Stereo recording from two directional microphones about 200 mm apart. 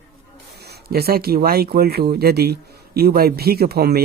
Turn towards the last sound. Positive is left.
turn(degrees=-50)  # may be behind; listen again after turning